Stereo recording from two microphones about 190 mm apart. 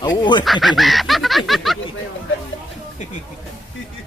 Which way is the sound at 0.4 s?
Centre (ahead or behind).